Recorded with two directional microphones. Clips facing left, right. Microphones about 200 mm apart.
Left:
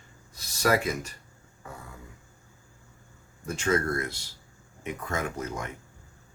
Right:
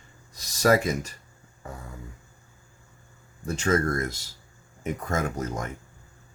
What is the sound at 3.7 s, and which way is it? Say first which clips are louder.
Speech: right 2 dB; 45° right (ahead or behind).